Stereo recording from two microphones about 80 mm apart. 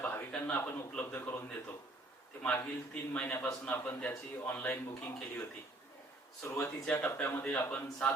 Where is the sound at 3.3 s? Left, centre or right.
Left.